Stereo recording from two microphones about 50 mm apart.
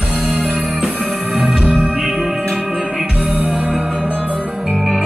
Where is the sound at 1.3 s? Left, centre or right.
Centre.